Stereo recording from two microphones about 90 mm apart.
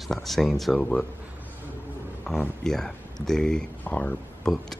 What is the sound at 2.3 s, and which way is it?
Speech, 10° left (ahead or behind).